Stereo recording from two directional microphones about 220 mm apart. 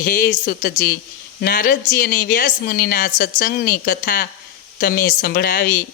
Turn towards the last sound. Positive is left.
turn(degrees=45)  # may be behind; listen again after turning